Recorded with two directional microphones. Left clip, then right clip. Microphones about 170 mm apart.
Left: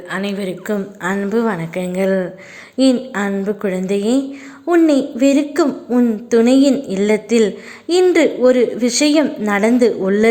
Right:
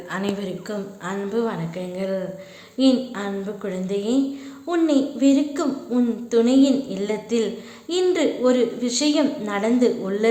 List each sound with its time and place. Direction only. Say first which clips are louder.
0.1 s a woman's voice: left 5 dB; 25° left (ahead or behind)
0.7 s a woman's voice: left 12 dB; 45° left (ahead or behind)